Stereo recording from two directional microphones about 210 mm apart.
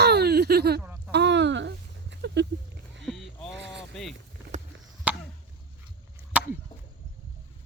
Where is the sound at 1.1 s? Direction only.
55° right (ahead or behind).